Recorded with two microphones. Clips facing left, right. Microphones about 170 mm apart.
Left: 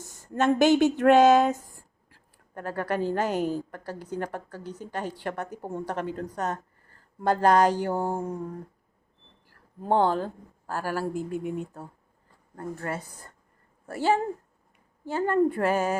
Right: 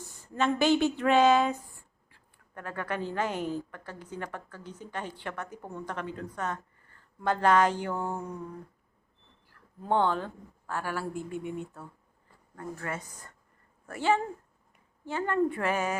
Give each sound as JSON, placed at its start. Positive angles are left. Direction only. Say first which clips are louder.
{"t": 0.0, "sound": "a woman's voice", "louder": "left 4 dB", "side_deg": 45}
{"t": 9.8, "sound": "a woman's voice", "louder": "left 4 dB", "side_deg": 35}
{"t": 11.3, "sound": "speech", "louder": "left 4 dB", "side_deg": 0}
{"t": 11.6, "sound": "a woman's voice", "louder": "left 4 dB", "side_deg": 40}